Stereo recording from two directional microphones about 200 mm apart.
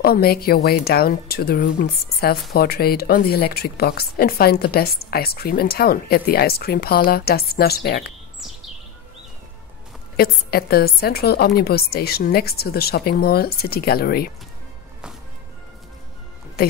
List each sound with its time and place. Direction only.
0.0 s a woman's voice: 50° left (ahead or behind)
10.1 s a woman's voice: 50° left (ahead or behind)
16.6 s a woman's voice: 50° left (ahead or behind)